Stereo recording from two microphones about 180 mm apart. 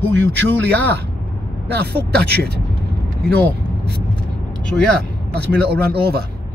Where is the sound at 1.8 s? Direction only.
65° right (ahead or behind).